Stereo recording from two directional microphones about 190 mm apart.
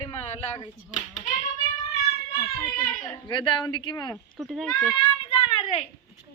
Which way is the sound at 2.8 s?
45° left (ahead or behind).